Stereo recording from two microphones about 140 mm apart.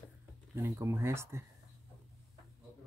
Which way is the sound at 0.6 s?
20° right (ahead or behind).